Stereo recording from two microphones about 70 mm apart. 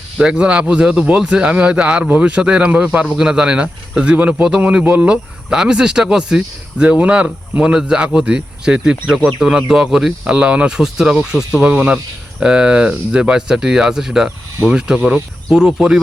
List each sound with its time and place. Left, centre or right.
0.2 s a man's voice: centre